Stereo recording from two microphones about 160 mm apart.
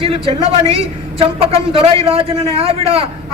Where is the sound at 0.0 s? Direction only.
35° right (ahead or behind).